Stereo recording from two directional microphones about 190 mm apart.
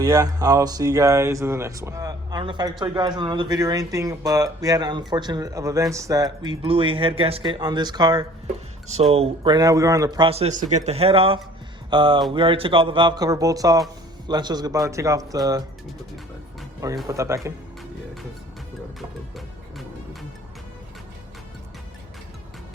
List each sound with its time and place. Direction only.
0.0 s speech: 15° right (ahead or behind)
17.1 s speech: 15° right (ahead or behind)